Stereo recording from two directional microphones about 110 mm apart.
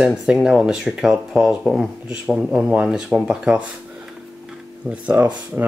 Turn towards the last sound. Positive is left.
turn(degrees=-15)  # may be behind; listen again after turning